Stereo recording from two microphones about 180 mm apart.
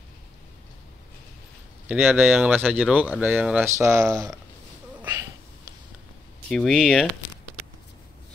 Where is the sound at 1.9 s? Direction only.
5° right (ahead or behind).